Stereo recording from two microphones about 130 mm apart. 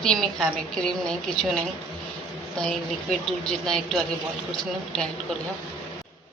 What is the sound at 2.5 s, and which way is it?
A woman's voice, 5° left (ahead or behind).